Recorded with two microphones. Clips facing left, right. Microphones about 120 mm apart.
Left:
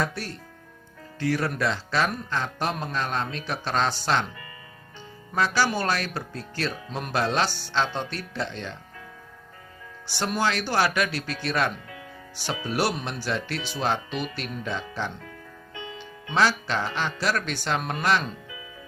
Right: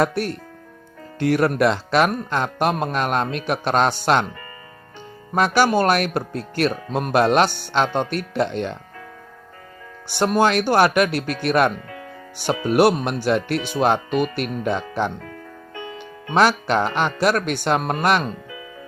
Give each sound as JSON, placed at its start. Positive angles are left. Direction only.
{"t": 0.0, "sound": "speech", "side_deg": -60}
{"t": 10.1, "sound": "speech", "side_deg": -50}